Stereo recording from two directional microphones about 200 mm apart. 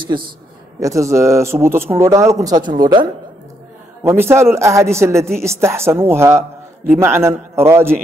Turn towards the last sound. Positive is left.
turn(degrees=-10)  # may be behind; listen again after turning